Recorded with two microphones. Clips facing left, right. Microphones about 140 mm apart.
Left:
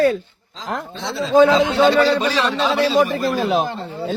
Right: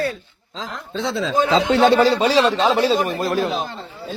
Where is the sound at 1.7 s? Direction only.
75° right (ahead or behind).